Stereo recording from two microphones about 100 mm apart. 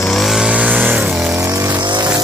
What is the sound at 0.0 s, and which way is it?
Vehicle, centre (ahead or behind).